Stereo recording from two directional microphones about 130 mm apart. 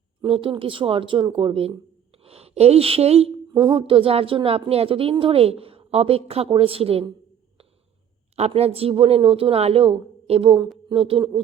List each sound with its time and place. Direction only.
0.2 s a woman's voice: 45° right (ahead or behind)
3.5 s a woman's voice: 35° right (ahead or behind)
8.4 s a woman's voice: 55° right (ahead or behind)